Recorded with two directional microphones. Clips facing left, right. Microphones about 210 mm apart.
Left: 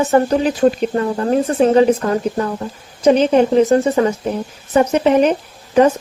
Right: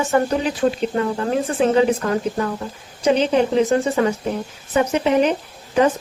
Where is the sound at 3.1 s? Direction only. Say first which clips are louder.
Left 5 dB; 40° left (ahead or behind).